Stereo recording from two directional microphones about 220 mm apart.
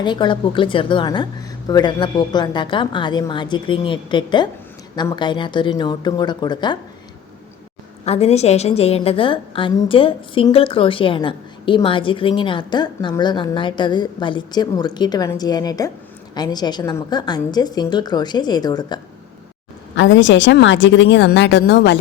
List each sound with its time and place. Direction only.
0.0 s a woman's voice: 20° left (ahead or behind)
8.0 s a woman's voice: 30° left (ahead or behind)
20.0 s speech: 55° left (ahead or behind)